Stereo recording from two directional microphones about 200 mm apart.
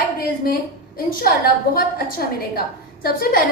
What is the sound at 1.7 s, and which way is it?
A woman's voice, 45° left (ahead or behind).